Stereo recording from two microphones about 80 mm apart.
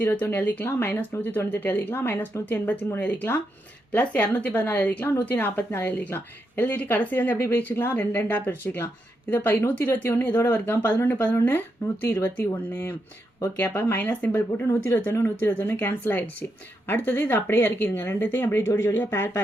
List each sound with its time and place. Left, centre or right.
0.0 s speech: left
14.0 s speech: left